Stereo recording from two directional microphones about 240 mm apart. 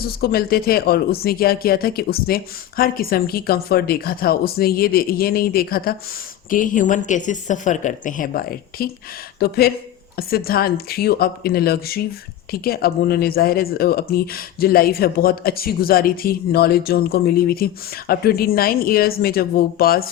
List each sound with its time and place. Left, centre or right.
0.0 s speech: left